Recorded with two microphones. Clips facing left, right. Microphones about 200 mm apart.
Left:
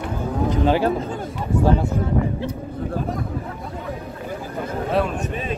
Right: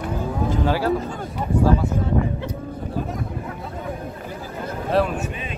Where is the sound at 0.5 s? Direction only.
20° left (ahead or behind).